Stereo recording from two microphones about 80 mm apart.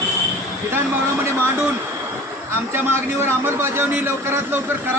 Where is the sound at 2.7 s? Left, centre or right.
Right.